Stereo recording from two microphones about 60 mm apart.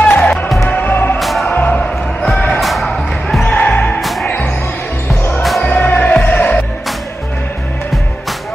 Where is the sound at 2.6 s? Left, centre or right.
Centre.